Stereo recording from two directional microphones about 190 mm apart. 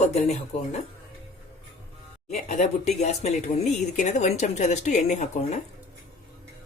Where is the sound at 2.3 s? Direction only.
40° left (ahead or behind).